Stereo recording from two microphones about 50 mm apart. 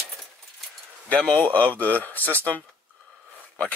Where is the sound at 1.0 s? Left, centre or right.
Left.